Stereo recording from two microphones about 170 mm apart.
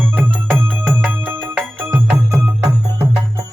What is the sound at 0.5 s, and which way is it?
Music, 10° right (ahead or behind).